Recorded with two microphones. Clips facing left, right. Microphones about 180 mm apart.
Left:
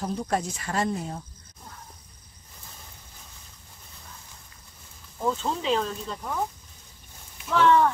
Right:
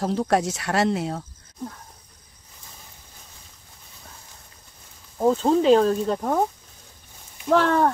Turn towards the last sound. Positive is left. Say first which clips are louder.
# right 1 dB
turn(degrees=-45)  # may be behind; listen again after turning